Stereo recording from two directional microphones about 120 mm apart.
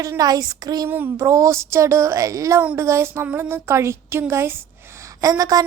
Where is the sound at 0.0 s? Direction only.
30° right (ahead or behind).